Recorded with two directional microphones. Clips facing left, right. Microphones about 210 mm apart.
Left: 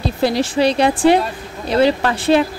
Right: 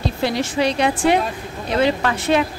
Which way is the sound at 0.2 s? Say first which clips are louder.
Left 5 dB; 35° left (ahead or behind).